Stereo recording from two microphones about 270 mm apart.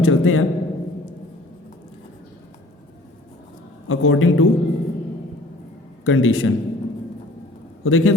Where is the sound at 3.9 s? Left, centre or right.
Left.